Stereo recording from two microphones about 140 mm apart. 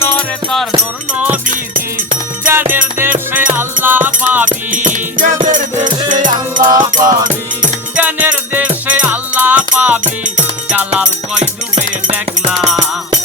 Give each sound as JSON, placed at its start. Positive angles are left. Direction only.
{"t": 0.0, "sound": "music", "side_deg": 15}
{"t": 1.1, "sound": "music", "side_deg": -10}
{"t": 2.4, "sound": "music", "side_deg": -15}
{"t": 4.4, "sound": "music", "side_deg": -65}
{"t": 7.9, "sound": "music", "side_deg": -10}
{"t": 10.0, "sound": "music", "side_deg": -65}
{"t": 10.7, "sound": "music", "side_deg": -10}
{"t": 12.5, "sound": "music", "side_deg": -5}